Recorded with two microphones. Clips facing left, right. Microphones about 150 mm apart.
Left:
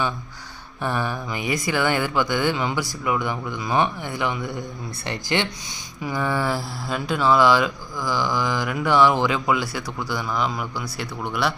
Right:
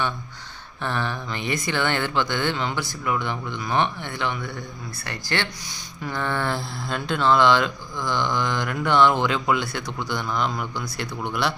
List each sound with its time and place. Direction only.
0.8 s speech: 10° left (ahead or behind)